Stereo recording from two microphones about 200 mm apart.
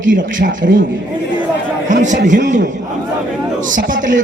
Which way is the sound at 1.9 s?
40° right (ahead or behind).